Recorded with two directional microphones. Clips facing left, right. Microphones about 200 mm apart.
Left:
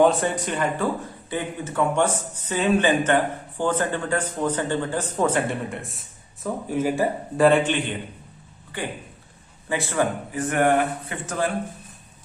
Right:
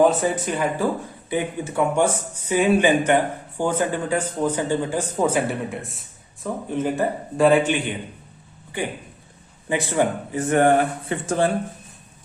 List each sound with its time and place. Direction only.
0.0 s a man's voice: centre (ahead or behind)
9.6 s speech: 20° right (ahead or behind)